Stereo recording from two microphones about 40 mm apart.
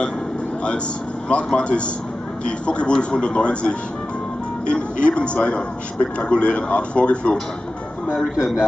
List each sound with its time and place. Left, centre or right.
1.3 s a man's voice: left
8.1 s speech: centre